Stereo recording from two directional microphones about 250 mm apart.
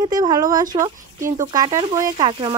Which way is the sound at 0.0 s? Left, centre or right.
Centre.